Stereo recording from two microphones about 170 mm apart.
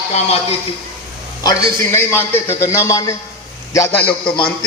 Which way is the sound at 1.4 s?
15° left (ahead or behind).